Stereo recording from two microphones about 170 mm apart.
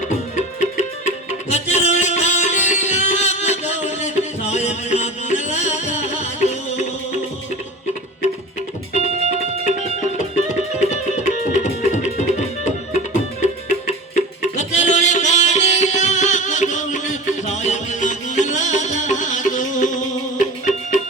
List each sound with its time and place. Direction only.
1.0 s music: 40° left (ahead or behind)
9.0 s music: 40° right (ahead or behind)
10.5 s music: 45° left (ahead or behind)